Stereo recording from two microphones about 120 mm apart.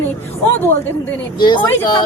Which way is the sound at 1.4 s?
40° left (ahead or behind).